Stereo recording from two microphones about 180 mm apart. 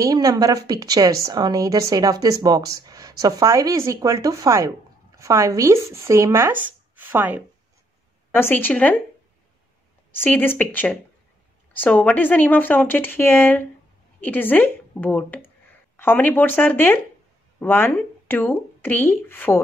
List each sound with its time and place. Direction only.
0.0 s speech: 20° right (ahead or behind)
8.3 s speech: 10° left (ahead or behind)
10.1 s speech: 10° left (ahead or behind)